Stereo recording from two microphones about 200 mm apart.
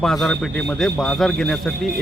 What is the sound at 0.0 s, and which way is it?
A man's voice, centre (ahead or behind).